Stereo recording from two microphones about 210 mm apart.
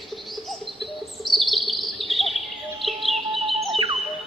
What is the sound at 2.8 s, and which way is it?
Music, centre (ahead or behind).